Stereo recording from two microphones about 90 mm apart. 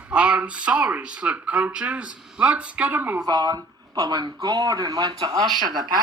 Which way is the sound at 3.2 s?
50° right (ahead or behind).